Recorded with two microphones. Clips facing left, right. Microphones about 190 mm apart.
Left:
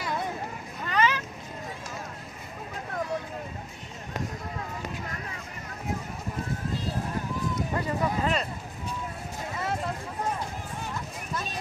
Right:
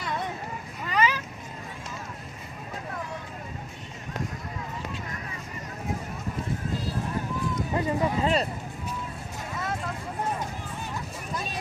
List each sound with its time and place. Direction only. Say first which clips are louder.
0.9 s vehicle: even; 5° right (ahead or behind)
7.8 s speech: right 4 dB; 30° right (ahead or behind)